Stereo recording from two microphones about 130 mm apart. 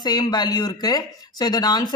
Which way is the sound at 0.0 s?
30° left (ahead or behind).